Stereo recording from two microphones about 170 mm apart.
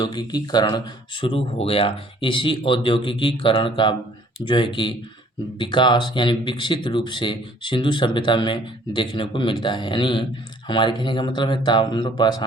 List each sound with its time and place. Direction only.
0.0 s speech: 25° left (ahead or behind)